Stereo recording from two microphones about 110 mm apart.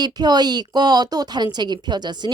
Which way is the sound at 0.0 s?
40° right (ahead or behind).